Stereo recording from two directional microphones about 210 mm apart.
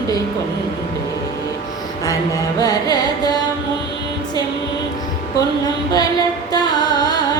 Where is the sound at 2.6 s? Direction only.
20° left (ahead or behind).